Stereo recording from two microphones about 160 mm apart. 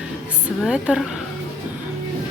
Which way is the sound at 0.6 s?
5° right (ahead or behind).